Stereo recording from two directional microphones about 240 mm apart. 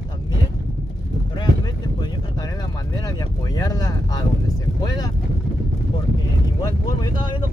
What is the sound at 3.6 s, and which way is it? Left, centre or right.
Speech, centre.